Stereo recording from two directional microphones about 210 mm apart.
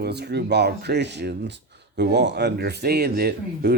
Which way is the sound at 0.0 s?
50° right (ahead or behind).